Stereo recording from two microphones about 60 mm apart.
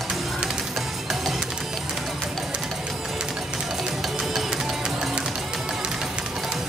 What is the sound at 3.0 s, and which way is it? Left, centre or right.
Music, centre.